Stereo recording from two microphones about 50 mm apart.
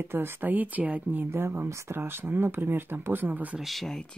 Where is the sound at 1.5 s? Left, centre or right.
Right.